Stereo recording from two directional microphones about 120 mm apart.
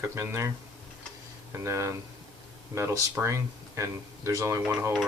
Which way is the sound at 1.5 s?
25° right (ahead or behind).